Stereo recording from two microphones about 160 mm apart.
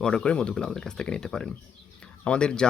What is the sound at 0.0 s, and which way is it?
Speech, 5° left (ahead or behind).